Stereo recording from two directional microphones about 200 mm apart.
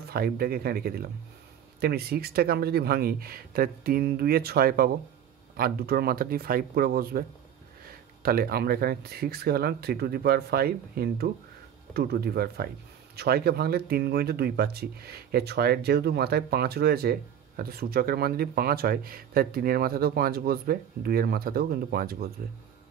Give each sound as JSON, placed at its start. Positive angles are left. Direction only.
{"t": 0.1, "sound": "speech", "side_deg": -50}